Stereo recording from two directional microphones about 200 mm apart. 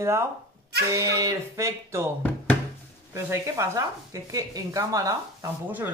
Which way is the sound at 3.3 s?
15° right (ahead or behind).